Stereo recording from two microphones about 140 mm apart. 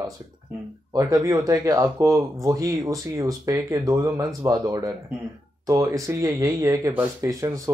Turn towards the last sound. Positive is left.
turn(degrees=-20)  # may be behind; listen again after turning